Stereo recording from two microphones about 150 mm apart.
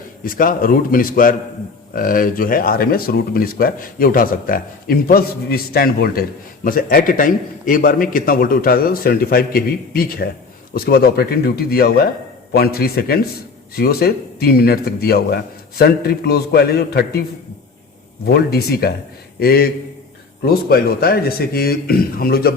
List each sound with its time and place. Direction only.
0.3 s speech: 70° left (ahead or behind); by 6.2 s 85° left
6.7 s a man's voice: 70° left (ahead or behind); by 17.2 s 90° left
18.3 s a man's voice: 90° left